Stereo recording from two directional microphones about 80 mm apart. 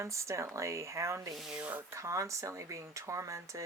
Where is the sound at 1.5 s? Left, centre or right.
Centre.